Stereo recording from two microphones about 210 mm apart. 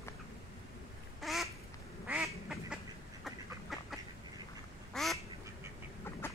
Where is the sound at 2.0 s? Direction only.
Centre (ahead or behind).